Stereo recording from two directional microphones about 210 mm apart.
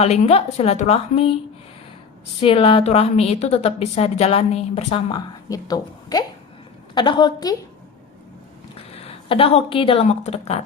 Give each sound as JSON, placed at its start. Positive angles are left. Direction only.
{"t": 0.0, "sound": "a woman's voice", "side_deg": 30}
{"t": 2.4, "sound": "a woman's voice", "side_deg": 25}
{"t": 8.9, "sound": "speech", "side_deg": 30}